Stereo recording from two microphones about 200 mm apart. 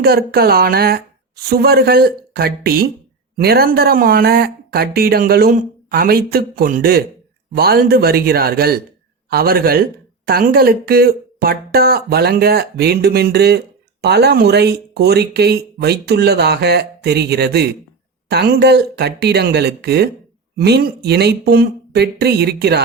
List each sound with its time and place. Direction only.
0.0 s speech: 50° right (ahead or behind)